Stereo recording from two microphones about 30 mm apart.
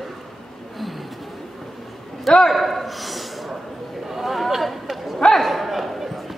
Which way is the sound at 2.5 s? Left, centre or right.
Centre.